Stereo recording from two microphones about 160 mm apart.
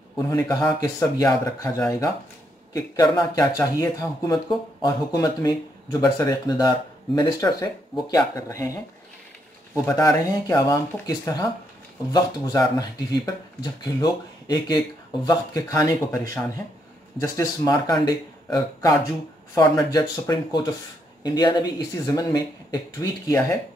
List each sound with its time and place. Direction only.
0.3 s speech: 20° left (ahead or behind)
9.8 s speech: 20° left (ahead or behind)